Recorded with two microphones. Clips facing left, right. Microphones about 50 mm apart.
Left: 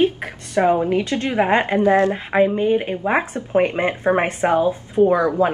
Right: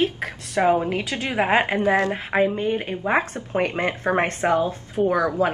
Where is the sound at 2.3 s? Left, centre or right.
Centre.